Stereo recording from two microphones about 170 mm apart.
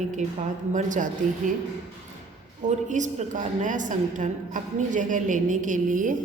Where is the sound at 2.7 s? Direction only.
45° right (ahead or behind).